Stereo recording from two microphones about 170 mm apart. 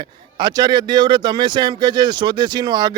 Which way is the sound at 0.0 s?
25° right (ahead or behind).